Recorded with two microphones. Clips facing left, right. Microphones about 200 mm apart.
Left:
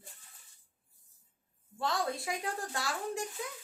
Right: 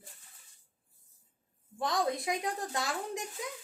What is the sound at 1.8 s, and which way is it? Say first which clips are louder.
Speech: right 3 dB; 15° right (ahead or behind).